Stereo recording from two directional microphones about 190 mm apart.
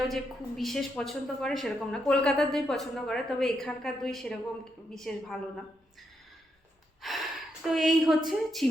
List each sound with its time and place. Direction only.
0.1 s a woman's voice: centre (ahead or behind)
7.0 s a woman's voice: centre (ahead or behind)